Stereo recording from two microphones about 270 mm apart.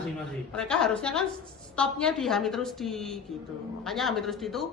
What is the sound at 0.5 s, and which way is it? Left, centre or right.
A woman's voice, centre.